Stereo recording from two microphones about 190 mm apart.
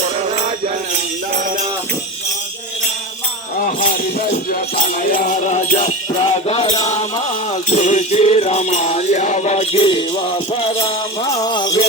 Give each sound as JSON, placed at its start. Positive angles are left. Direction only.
{"t": 0.0, "sound": "music", "side_deg": -35}
{"t": 3.6, "sound": "music", "side_deg": 50}